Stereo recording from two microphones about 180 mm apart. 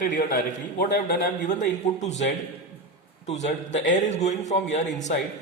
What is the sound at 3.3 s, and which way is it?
Speech, 40° left (ahead or behind).